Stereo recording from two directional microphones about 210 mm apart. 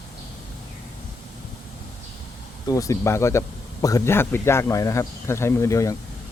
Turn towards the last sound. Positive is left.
turn(degrees=15)  # may be behind; listen again after turning